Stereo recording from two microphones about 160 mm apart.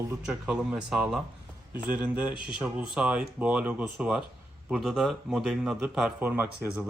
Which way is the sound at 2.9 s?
5° right (ahead or behind).